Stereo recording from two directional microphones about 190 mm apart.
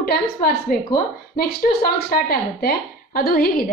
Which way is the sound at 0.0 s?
55° left (ahead or behind).